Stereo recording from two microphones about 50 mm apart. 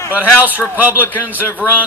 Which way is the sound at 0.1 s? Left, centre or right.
Right.